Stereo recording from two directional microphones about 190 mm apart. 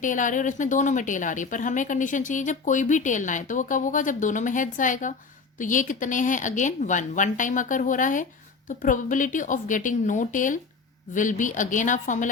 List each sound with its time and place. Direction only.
0.0 s a woman's voice: 45° left (ahead or behind)